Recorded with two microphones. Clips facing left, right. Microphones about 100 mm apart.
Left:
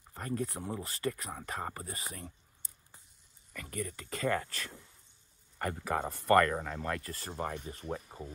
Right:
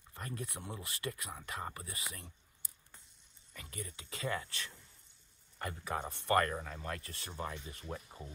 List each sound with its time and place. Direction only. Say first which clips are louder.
0.1 s speech: left 8 dB; 35° left (ahead or behind)
3.7 s speech: left 8 dB; 50° left (ahead or behind)
5.6 s speech: left 6 dB; 55° left (ahead or behind); by 8.3 s 35° left (ahead or behind)